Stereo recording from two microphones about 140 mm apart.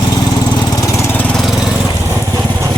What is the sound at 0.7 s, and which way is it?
Lawn mower, 20° left (ahead or behind).